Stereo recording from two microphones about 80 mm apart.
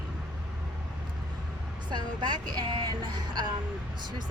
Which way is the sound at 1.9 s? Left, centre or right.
Right.